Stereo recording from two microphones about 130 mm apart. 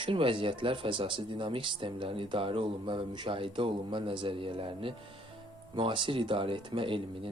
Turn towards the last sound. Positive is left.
turn(degrees=-40)  # may be behind; listen again after turning